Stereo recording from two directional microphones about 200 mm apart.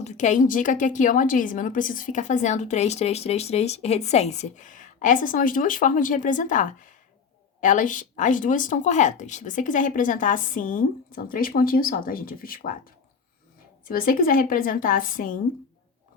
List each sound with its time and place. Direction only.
0.0 s a woman's voice: 35° left (ahead or behind)
13.8 s a woman's voice: 45° left (ahead or behind)